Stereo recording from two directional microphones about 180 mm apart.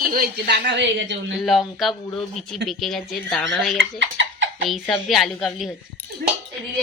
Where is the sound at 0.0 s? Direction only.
50° right (ahead or behind); by 1.4 s 80° right.